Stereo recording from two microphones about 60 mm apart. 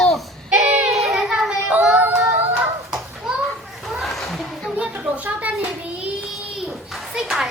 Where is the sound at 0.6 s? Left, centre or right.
Right.